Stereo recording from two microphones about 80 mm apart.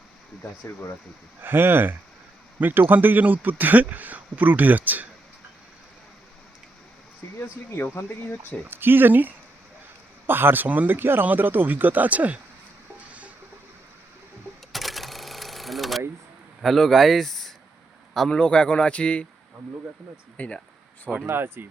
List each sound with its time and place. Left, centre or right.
1.4 s speech: right
7.3 s speech: left
8.7 s speech: right
13.1 s music: centre
14.7 s cash register: centre
16.6 s a man's voice: centre
20.3 s a man's voice: centre
21.2 s speech: right